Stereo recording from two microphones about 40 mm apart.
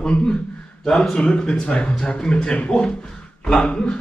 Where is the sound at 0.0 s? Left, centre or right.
Left.